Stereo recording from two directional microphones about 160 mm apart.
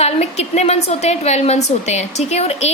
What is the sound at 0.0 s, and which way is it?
A woman's voice, 45° left (ahead or behind).